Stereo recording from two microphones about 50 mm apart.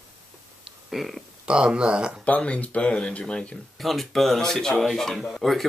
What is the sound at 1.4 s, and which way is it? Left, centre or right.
Speech, centre.